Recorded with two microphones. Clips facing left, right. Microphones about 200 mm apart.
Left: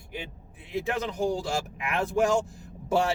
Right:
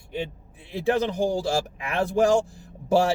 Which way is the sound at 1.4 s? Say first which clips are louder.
Right 5 dB; 35° right (ahead or behind).